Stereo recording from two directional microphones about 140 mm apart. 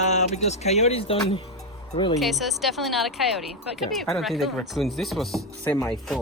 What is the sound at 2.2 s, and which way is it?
Speech, centre (ahead or behind).